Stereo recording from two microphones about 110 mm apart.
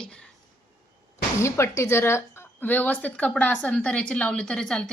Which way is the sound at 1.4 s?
25° left (ahead or behind).